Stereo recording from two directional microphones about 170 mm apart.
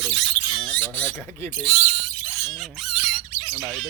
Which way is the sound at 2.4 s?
Centre (ahead or behind).